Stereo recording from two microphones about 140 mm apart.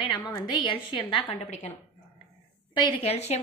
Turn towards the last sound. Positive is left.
turn(degrees=50)  # may be behind; listen again after turning